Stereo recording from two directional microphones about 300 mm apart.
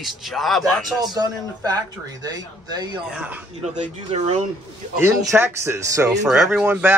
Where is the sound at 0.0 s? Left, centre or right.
Centre.